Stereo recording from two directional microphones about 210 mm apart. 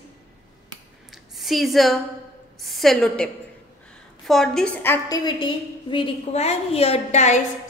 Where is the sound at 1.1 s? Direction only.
Centre (ahead or behind).